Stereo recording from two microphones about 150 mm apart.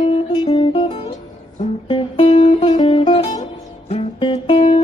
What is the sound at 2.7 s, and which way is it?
Music, 30° left (ahead or behind).